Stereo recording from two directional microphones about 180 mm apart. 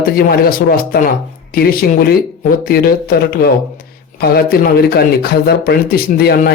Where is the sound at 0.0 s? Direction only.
55° left (ahead or behind).